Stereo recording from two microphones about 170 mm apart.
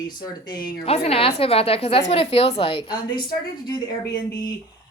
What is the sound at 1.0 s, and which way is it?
A woman's voice, 35° left (ahead or behind).